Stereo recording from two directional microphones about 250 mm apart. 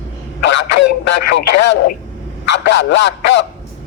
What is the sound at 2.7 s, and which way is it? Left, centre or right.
Speech, left.